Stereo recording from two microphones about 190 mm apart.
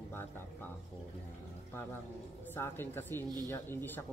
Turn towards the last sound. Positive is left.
turn(degrees=10)  # may be behind; listen again after turning